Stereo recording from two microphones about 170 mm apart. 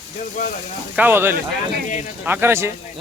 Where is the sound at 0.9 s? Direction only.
10° right (ahead or behind).